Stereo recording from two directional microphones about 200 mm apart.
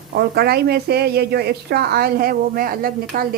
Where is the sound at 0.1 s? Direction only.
55° right (ahead or behind).